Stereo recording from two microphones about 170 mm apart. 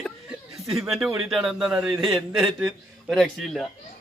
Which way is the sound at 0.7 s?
Centre (ahead or behind).